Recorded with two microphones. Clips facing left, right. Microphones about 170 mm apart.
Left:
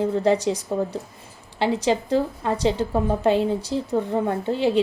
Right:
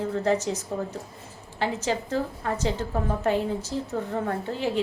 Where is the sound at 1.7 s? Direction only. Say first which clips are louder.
Left 7 dB; 15° left (ahead or behind).